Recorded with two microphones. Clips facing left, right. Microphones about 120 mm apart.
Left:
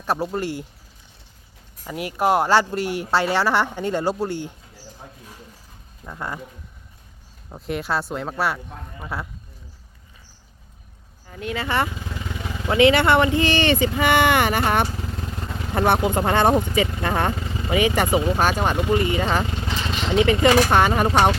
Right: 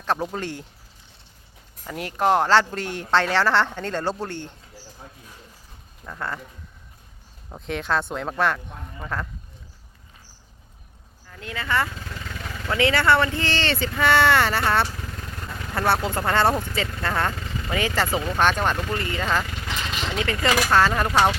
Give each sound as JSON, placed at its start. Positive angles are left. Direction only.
{"t": 0.0, "sound": "speech", "side_deg": 10}
{"t": 1.8, "sound": "speech", "side_deg": 10}
{"t": 6.1, "sound": "speech", "side_deg": 15}
{"t": 7.5, "sound": "speech", "side_deg": 5}
{"t": 11.3, "sound": "speech", "side_deg": 20}